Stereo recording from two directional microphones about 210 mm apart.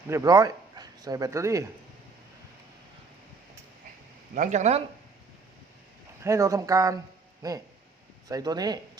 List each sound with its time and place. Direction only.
0.1 s speech: 15° right (ahead or behind)
4.4 s speech: 35° right (ahead or behind)
6.2 s speech: 15° right (ahead or behind)